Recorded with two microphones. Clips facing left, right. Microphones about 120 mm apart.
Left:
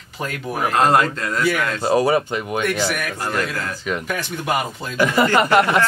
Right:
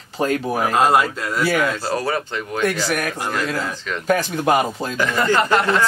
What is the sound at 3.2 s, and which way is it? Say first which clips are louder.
Speech: left 1 dB; 10° right (ahead or behind).